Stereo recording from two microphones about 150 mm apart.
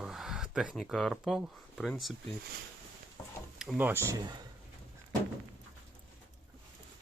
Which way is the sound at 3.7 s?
15° right (ahead or behind).